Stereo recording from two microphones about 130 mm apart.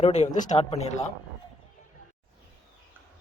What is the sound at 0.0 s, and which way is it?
Speech, 60° left (ahead or behind).